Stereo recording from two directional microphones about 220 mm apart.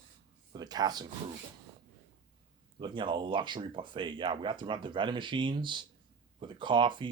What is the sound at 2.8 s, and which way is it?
Speech, 20° right (ahead or behind).